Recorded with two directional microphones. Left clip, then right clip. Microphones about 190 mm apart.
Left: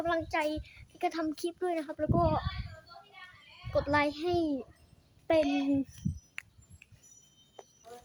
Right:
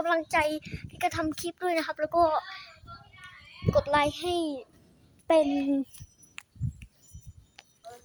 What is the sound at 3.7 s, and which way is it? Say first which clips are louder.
A woman's voice: right 4 dB; 15° right (ahead or behind).